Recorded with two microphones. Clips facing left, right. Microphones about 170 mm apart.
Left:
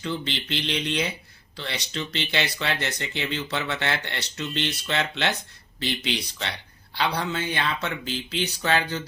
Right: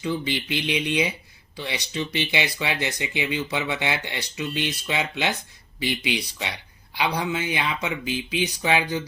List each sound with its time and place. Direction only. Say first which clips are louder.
0.0 s speech: right 3 dB; 10° right (ahead or behind)